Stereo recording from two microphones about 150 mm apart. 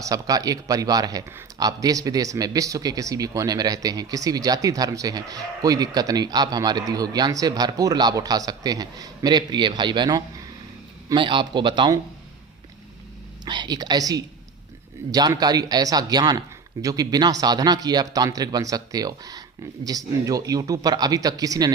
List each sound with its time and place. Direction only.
0.0 s a man's voice: 25° right (ahead or behind)
13.4 s a man's voice: 30° right (ahead or behind)